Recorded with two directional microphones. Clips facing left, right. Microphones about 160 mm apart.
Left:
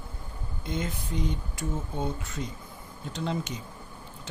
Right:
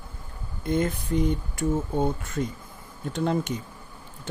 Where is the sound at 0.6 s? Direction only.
50° right (ahead or behind).